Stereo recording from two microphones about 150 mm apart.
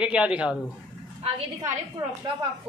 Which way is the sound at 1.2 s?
40° right (ahead or behind).